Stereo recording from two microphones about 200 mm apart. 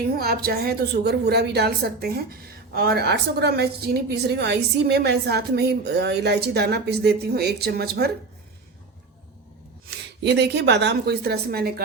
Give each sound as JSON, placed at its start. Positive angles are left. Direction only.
{"t": 0.2, "sound": "a woman's voice", "side_deg": -50}
{"t": 10.2, "sound": "a woman's voice", "side_deg": -55}